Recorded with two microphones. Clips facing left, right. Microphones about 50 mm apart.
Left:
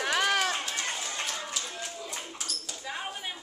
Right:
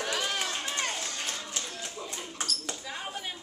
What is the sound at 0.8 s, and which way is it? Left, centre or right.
Run, centre.